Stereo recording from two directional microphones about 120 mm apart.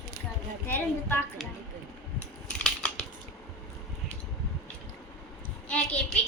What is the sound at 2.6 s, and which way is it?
Scissors, 10° left (ahead or behind).